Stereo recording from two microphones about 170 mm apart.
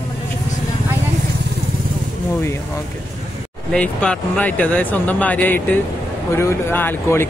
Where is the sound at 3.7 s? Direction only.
5° left (ahead or behind).